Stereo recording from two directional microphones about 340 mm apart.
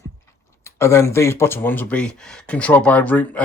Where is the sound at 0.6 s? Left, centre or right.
Centre.